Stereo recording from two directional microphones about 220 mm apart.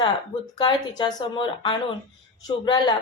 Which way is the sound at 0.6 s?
20° left (ahead or behind).